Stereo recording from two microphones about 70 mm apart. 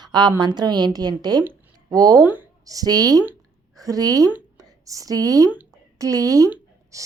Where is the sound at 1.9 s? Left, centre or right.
Right.